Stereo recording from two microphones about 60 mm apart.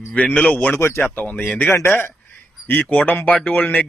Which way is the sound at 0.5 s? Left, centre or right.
Left.